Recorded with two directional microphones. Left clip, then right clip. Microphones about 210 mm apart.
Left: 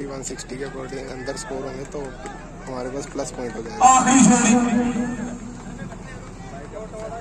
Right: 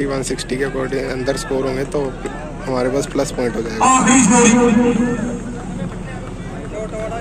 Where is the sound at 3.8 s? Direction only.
50° left (ahead or behind).